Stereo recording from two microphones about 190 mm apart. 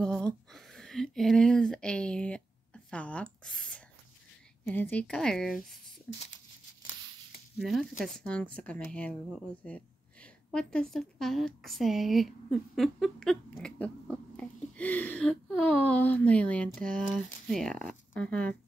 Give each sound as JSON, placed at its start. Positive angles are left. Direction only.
{"t": 0.0, "sound": "a sound", "side_deg": 5}
{"t": 4.6, "sound": "speech", "side_deg": 10}
{"t": 7.5, "sound": "a woman's voice", "side_deg": 0}
{"t": 17.5, "sound": "zipper", "side_deg": 0}